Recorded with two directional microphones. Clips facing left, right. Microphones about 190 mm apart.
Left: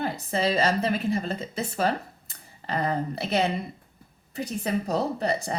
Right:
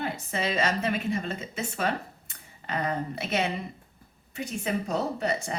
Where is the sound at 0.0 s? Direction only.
35° left (ahead or behind).